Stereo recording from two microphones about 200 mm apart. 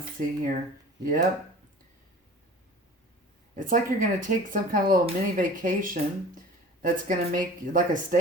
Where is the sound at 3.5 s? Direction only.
40° right (ahead or behind).